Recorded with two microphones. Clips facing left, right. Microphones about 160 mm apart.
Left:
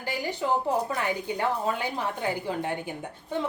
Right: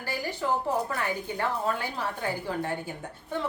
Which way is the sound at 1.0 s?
15° left (ahead or behind).